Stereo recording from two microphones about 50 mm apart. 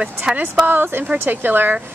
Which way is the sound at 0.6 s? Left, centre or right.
Right.